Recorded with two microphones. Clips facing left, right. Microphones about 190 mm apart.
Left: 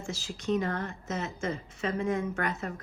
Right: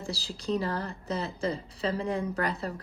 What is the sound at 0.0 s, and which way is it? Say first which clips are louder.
A woman's voice: even; 35° right (ahead or behind).